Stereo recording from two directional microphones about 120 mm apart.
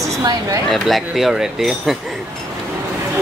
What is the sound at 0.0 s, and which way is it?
Speech, 30° right (ahead or behind).